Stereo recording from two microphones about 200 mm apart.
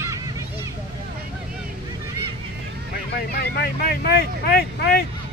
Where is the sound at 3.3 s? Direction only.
50° left (ahead or behind).